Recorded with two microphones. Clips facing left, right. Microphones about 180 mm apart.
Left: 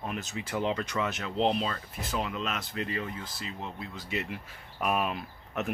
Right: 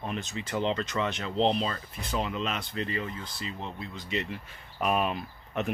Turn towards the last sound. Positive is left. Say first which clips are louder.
# right 2 dB
turn(degrees=0)  # may be behind; listen again after turning